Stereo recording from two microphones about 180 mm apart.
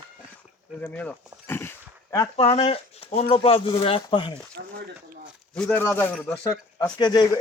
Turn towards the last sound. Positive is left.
turn(degrees=20)  # may be behind; listen again after turning